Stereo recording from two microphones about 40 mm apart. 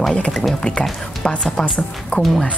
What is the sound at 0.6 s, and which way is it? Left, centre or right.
A woman's voice, centre.